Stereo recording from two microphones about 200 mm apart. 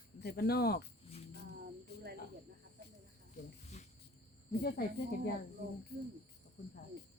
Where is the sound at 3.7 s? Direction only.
35° left (ahead or behind).